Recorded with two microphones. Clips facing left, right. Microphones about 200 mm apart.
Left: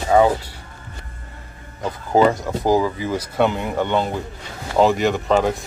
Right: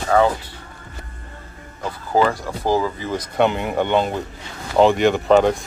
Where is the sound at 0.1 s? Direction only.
15° left (ahead or behind).